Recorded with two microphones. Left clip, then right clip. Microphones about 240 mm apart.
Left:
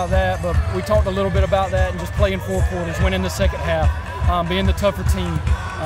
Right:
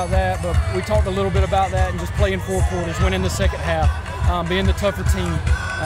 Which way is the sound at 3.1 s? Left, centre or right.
Centre.